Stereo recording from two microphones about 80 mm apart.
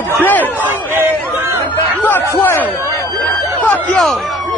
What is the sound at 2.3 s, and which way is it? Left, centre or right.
A man's voice, left.